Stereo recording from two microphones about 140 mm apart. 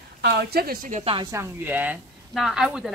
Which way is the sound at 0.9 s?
45° right (ahead or behind).